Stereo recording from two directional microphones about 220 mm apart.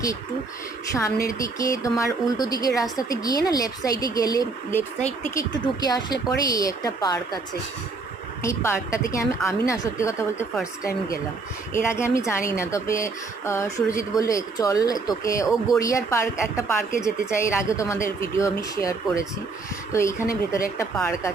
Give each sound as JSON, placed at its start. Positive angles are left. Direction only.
{"t": 0.9, "sound": "speech", "side_deg": 15}
{"t": 8.4, "sound": "speech", "side_deg": 15}
{"t": 11.7, "sound": "speech", "side_deg": 10}